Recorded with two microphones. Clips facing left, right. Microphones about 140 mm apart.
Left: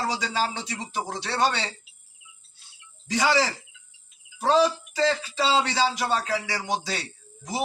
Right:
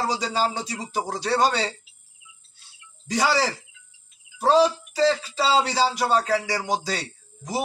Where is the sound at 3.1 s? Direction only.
35° right (ahead or behind).